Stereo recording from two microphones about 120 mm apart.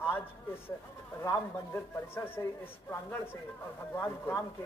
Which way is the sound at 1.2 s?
20° left (ahead or behind).